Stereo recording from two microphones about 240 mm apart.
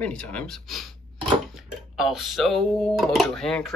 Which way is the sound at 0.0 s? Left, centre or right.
Centre.